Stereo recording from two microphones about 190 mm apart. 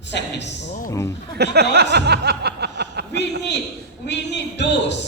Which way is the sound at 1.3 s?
60° right (ahead or behind).